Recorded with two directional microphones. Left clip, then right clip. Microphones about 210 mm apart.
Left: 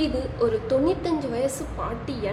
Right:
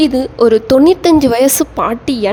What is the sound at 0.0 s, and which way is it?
A woman's voice, 55° right (ahead or behind).